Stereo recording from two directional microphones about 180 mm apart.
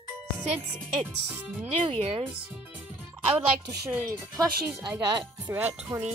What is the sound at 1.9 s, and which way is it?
Speech, 30° right (ahead or behind).